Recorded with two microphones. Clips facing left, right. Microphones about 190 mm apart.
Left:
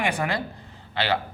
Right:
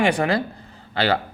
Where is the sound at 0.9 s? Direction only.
40° right (ahead or behind).